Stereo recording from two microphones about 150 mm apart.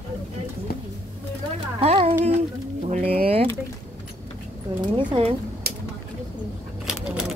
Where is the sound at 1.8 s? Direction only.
40° right (ahead or behind).